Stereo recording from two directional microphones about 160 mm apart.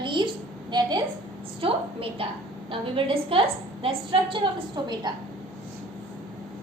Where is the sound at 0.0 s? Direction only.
30° right (ahead or behind).